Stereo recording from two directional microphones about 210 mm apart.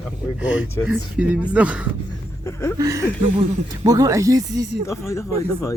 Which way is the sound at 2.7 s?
15° right (ahead or behind).